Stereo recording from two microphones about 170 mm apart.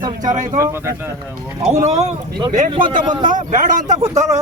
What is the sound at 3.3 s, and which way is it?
Speech, 50° right (ahead or behind).